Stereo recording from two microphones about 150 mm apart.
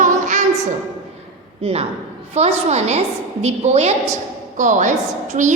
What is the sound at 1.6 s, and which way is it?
A woman's voice, 40° right (ahead or behind).